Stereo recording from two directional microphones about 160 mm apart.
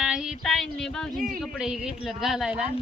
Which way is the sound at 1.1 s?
60° right (ahead or behind).